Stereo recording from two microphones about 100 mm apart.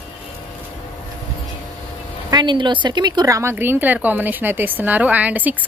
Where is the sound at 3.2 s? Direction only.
35° right (ahead or behind).